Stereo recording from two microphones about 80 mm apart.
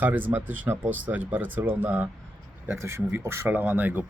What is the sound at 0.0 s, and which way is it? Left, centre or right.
Speech, right.